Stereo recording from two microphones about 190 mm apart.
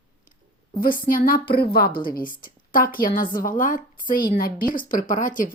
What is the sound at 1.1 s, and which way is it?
A woman's voice, 50° left (ahead or behind).